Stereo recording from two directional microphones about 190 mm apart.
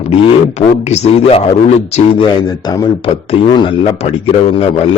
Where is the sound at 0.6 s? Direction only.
35° left (ahead or behind).